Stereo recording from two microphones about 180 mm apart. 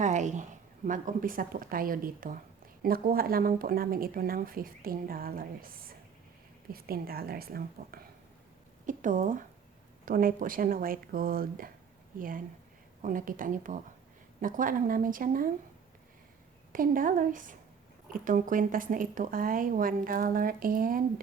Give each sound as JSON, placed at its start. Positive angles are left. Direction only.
{"t": 0.0, "sound": "a sound", "side_deg": -40}
{"t": 0.9, "sound": "a woman's voice", "side_deg": -50}
{"t": 6.7, "sound": "a woman's voice", "side_deg": -55}
{"t": 8.9, "sound": "a woman's voice", "side_deg": -45}
{"t": 13.0, "sound": "a woman's voice", "side_deg": -50}
{"t": 16.7, "sound": "a woman's voice", "side_deg": -50}